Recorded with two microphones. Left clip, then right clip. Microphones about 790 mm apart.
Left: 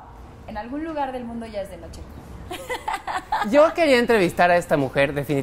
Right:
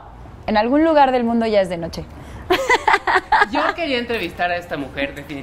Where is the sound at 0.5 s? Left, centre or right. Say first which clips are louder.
Right 15 dB; right.